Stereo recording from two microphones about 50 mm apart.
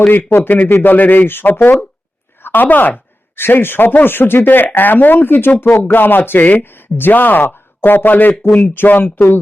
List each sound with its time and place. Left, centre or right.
0.3 s a man's voice: left